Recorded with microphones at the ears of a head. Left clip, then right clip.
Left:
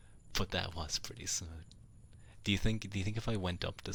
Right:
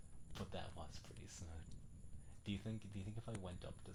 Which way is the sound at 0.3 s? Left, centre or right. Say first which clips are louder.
Left 14 dB; left.